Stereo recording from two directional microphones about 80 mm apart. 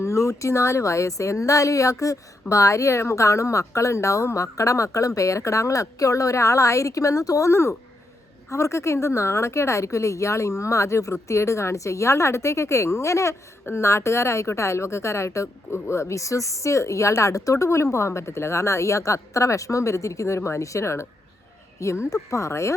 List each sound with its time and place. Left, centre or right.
0.0 s a woman's voice: left
22.1 s a woman's voice: left